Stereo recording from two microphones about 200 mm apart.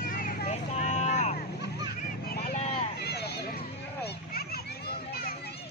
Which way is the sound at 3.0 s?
55° left (ahead or behind).